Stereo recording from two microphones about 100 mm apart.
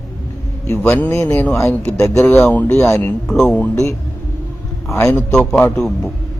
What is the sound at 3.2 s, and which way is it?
Speech, 5° left (ahead or behind).